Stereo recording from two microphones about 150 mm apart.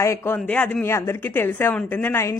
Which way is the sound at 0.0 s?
20° left (ahead or behind).